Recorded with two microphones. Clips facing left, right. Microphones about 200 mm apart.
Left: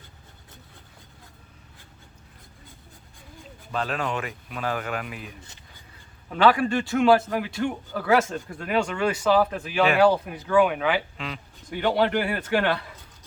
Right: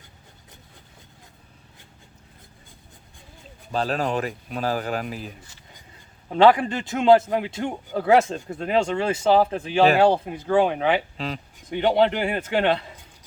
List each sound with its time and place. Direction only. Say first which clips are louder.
3.7 s a man's voice: right 4 dB; 35° right (ahead or behind)
11.7 s a man's voice: right 3 dB; 20° right (ahead or behind)